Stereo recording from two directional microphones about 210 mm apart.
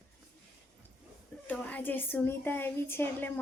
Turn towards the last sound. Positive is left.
turn(degrees=10)  # may be behind; listen again after turning